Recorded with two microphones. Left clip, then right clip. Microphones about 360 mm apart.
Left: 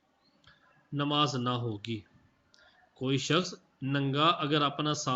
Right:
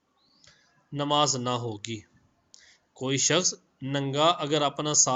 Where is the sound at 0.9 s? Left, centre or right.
Centre.